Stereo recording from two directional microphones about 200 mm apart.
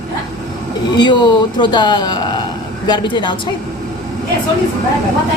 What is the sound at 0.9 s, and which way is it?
A woman's voice, 20° left (ahead or behind).